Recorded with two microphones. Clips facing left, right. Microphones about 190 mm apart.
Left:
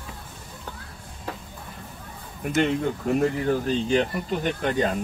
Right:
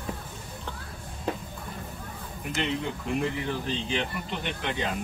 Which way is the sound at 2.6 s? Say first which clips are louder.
Left 7 dB; 45° left (ahead or behind).